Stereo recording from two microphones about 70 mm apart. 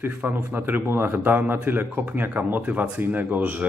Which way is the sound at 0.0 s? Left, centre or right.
Right.